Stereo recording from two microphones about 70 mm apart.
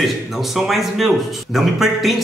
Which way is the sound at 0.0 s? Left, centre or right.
Centre.